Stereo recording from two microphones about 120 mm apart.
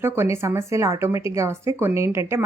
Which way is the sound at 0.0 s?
20° right (ahead or behind).